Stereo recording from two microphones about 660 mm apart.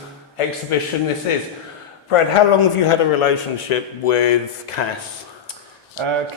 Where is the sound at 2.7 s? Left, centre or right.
Left.